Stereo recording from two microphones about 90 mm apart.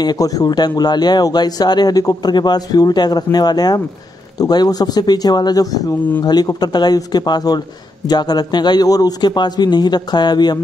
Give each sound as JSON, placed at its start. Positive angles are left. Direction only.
{"t": 0.0, "sound": "speech", "side_deg": 45}